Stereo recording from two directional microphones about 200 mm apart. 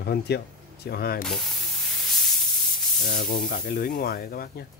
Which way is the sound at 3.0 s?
45° left (ahead or behind).